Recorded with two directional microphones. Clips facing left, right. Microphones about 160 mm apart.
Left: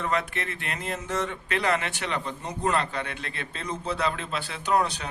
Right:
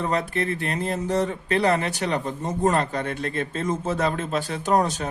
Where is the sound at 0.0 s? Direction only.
35° right (ahead or behind).